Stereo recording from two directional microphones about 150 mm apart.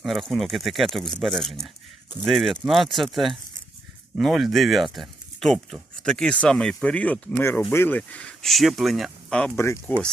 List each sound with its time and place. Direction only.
0.0 s speech: centre (ahead or behind)
9.6 s speech: 20° left (ahead or behind)